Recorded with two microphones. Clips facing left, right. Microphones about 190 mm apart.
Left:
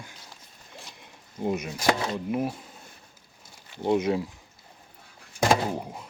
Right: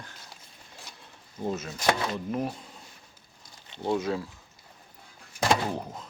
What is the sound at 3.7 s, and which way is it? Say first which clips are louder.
Speech: left 4 dB; 20° left (ahead or behind).